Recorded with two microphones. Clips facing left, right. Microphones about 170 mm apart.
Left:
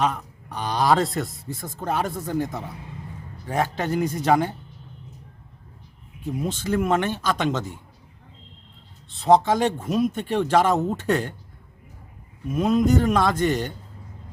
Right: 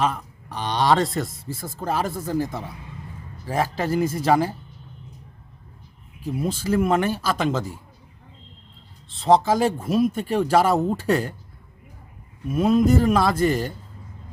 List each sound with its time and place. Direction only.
0.0 s speech: centre (ahead or behind)
6.2 s speech: 5° right (ahead or behind)
9.1 s speech: centre (ahead or behind)
12.5 s speech: 5° right (ahead or behind)